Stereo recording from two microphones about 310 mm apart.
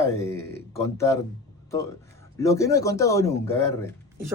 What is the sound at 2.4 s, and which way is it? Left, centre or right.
Speech, centre.